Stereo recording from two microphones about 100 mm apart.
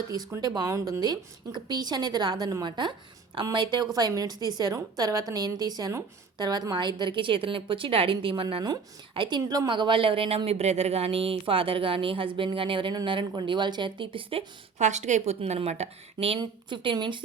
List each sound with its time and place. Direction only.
0.4 s a woman's voice: 40° right (ahead or behind); by 14.4 s 65° right (ahead or behind)
15.2 s speech: 90° right
16.4 s a woman's voice: 50° right (ahead or behind)